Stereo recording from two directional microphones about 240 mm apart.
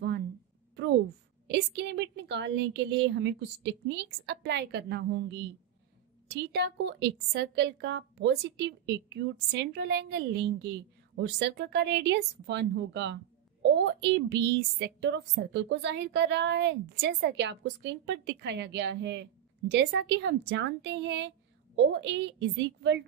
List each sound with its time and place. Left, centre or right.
1.5 s speech: right
6.5 s speech: right